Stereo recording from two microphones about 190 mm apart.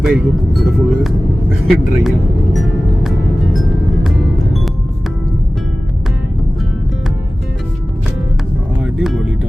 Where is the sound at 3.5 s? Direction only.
Centre (ahead or behind).